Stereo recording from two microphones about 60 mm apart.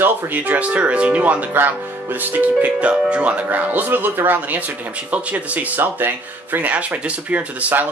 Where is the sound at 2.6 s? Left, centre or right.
Centre.